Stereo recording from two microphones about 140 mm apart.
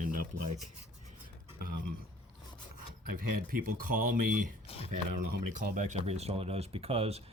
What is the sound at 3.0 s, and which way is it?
Speech, 90° right.